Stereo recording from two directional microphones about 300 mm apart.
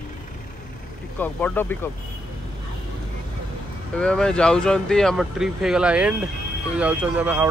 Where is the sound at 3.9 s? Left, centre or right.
Centre.